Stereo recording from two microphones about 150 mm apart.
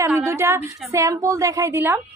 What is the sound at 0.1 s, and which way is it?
A woman's voice, 15° right (ahead or behind).